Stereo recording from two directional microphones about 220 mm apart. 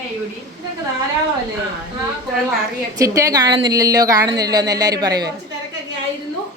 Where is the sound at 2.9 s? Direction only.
15° right (ahead or behind).